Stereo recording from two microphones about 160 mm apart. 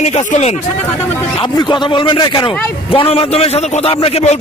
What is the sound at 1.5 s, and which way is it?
A man's voice, 30° left (ahead or behind).